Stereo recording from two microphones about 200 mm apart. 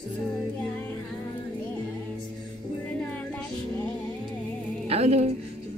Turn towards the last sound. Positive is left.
turn(degrees=-30)  # may be behind; listen again after turning